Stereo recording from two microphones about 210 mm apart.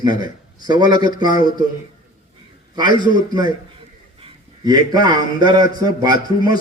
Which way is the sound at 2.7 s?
20° right (ahead or behind).